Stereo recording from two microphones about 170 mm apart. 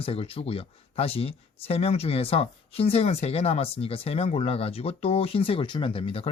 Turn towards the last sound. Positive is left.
turn(degrees=35)  # may be behind; listen again after turning